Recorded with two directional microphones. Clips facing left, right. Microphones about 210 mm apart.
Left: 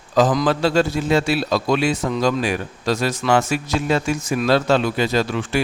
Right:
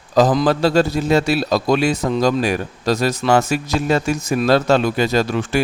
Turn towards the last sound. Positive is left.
turn(degrees=-45)  # may be behind; listen again after turning